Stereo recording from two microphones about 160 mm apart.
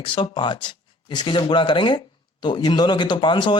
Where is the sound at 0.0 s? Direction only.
30° left (ahead or behind).